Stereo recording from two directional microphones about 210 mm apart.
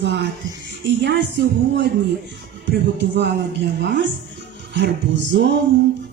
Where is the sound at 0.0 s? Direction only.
55° right (ahead or behind).